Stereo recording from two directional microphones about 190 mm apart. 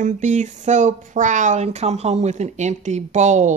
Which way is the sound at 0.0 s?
40° right (ahead or behind).